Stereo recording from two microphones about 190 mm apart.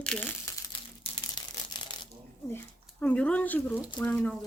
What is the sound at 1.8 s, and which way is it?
Shuffling cards, 20° left (ahead or behind).